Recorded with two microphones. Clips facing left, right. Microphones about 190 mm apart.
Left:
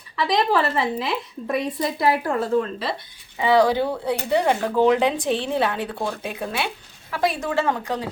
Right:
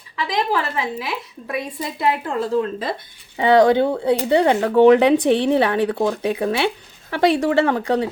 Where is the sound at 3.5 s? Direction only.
20° right (ahead or behind).